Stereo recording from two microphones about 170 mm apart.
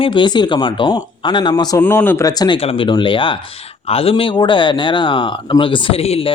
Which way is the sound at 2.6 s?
35° left (ahead or behind).